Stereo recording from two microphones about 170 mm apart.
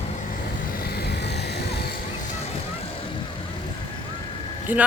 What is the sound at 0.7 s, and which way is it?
Vehicle, 65° left (ahead or behind).